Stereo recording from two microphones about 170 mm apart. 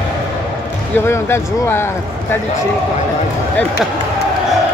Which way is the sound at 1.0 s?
15° left (ahead or behind).